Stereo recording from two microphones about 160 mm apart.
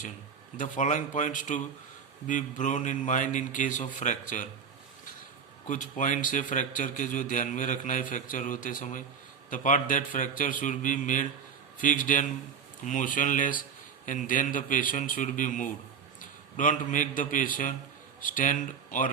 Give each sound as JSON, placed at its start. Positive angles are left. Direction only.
{"t": 0.5, "sound": "a man's voice", "side_deg": 55}
{"t": 5.6, "sound": "a man's voice", "side_deg": 50}